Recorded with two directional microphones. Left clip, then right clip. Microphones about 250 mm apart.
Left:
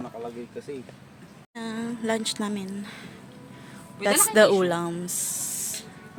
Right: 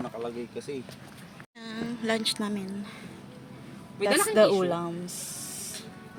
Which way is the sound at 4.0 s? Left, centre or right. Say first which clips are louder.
Left 3 dB; left.